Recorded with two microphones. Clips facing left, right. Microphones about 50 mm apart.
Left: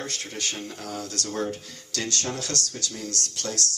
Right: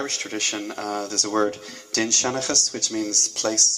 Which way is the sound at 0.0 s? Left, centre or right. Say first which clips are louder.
Right 5 dB; right.